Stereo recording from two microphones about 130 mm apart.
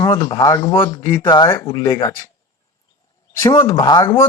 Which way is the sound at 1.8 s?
25° left (ahead or behind).